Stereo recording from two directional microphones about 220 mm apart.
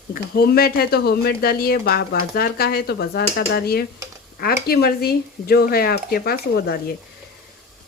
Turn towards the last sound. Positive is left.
turn(degrees=45)  # may be behind; listen again after turning